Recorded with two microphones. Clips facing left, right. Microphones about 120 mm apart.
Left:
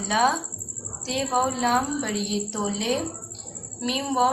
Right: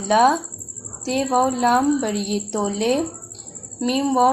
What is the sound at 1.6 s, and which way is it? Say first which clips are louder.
A woman's voice: right 6 dB; 50° right (ahead or behind).